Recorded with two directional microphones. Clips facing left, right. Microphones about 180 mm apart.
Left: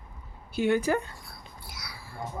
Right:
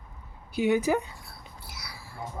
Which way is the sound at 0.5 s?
15° right (ahead or behind).